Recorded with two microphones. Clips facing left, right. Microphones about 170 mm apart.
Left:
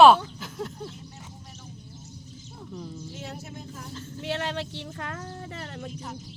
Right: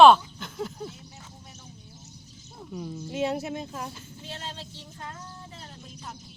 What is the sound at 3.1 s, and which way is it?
Speech, 70° right (ahead or behind).